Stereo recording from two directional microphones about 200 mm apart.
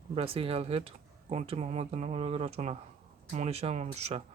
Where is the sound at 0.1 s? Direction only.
25° right (ahead or behind).